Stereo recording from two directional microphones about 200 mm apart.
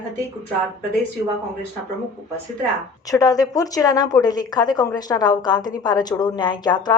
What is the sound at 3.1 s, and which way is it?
A woman's voice, 15° left (ahead or behind).